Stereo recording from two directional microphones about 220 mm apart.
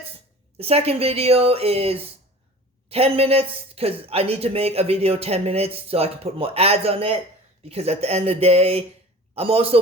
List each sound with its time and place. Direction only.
0.6 s speech: 25° right (ahead or behind)